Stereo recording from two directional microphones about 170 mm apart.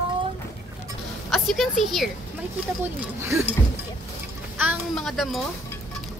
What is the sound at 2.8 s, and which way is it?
Speech, 15° right (ahead or behind).